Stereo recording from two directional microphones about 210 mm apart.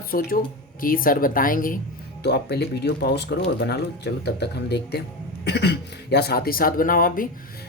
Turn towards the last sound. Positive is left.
turn(degrees=40)  # may be behind; listen again after turning